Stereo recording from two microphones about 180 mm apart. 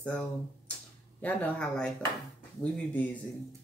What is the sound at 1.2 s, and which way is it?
Speech, 5° left (ahead or behind).